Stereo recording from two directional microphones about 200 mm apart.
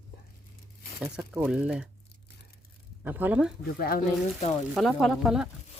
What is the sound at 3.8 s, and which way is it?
Speech, 50° left (ahead or behind).